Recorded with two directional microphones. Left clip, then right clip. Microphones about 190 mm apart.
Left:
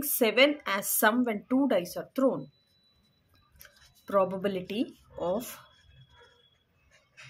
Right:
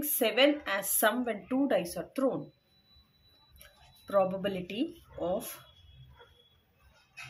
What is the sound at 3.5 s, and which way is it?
Speech, 30° left (ahead or behind).